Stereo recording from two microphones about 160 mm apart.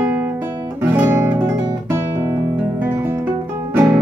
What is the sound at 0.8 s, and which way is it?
Music, 15° right (ahead or behind).